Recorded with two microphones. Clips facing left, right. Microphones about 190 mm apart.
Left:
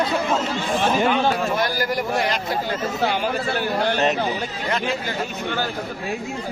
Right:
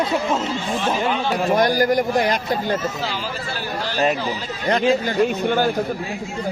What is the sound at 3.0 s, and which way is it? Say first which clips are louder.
Speech: left 5 dB; 60° left (ahead or behind).